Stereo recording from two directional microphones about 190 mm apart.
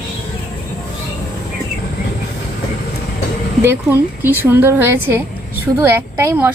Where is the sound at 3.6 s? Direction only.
10° right (ahead or behind).